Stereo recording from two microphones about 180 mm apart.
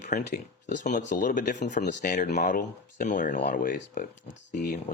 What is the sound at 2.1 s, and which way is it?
Speech, 45° left (ahead or behind).